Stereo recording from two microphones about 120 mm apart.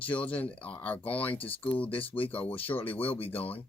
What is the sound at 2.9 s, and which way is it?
Speech, 50° left (ahead or behind).